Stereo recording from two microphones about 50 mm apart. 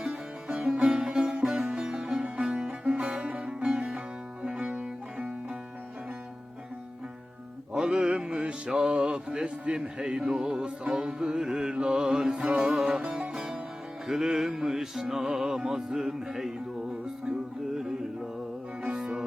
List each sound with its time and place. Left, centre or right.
0.4 s sitar: centre
2.4 s music: centre
2.6 s music: right
4.7 s music: right
7.7 s music: centre
13.0 s music: right
13.3 s music: centre
18.8 s music: centre